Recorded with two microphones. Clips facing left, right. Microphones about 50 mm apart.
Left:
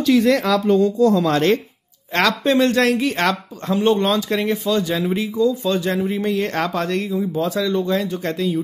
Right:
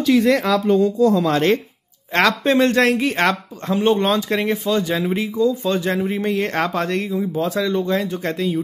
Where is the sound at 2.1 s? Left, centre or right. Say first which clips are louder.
Right 1 dB; right.